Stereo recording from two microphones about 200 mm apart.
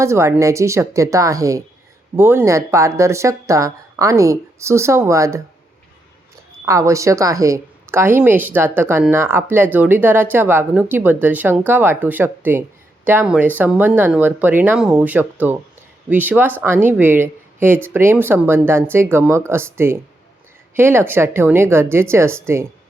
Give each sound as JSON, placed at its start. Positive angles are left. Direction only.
{"t": 0.0, "sound": "speech", "side_deg": -15}
{"t": 6.7, "sound": "speech", "side_deg": -15}